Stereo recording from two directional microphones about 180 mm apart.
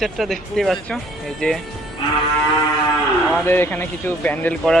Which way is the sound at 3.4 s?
10° left (ahead or behind).